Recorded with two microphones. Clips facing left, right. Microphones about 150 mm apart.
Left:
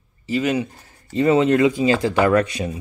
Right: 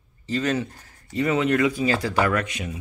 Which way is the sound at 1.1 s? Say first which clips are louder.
Left 6 dB; 30° left (ahead or behind).